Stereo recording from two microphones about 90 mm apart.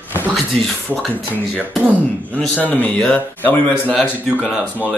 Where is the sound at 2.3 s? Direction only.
15° left (ahead or behind).